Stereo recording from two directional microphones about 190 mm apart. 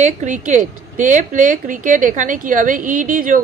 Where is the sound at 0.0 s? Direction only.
40° right (ahead or behind).